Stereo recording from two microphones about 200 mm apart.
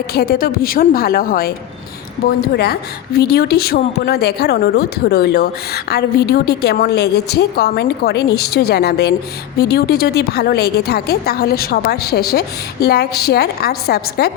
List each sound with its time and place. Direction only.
0.1 s speech: 50° left (ahead or behind)